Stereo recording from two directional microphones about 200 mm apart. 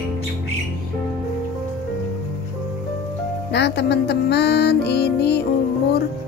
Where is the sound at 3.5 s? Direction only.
55° left (ahead or behind).